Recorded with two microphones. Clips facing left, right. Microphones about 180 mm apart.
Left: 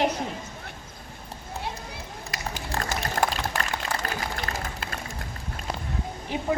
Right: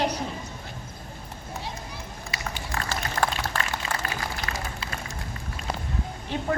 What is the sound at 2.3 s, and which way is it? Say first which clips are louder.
Run: left 1 dB; 45° left (ahead or behind).